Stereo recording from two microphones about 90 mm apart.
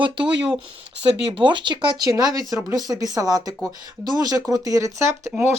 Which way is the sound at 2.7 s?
45° right (ahead or behind).